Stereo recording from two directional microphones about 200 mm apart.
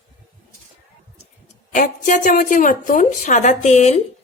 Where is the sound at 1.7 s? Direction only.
40° left (ahead or behind).